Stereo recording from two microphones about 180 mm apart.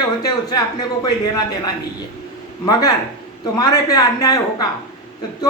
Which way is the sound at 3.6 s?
20° left (ahead or behind).